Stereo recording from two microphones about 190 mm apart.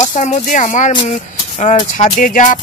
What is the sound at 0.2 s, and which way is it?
Speech, 40° left (ahead or behind).